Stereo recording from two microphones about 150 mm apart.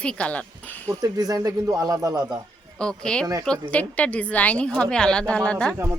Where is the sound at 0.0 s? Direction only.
5° left (ahead or behind).